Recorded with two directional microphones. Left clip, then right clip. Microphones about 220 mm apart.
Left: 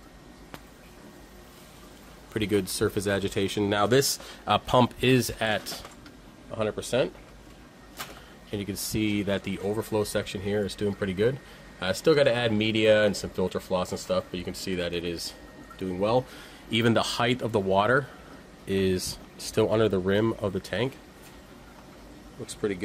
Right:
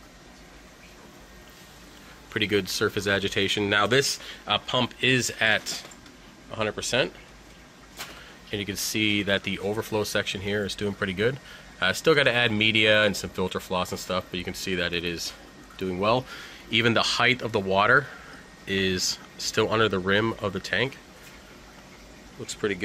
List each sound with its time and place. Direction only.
2.3 s speech: 10° left (ahead or behind)
8.5 s speech: 10° left (ahead or behind)
16.7 s speech: 15° left (ahead or behind)
22.5 s speech: 5° left (ahead or behind)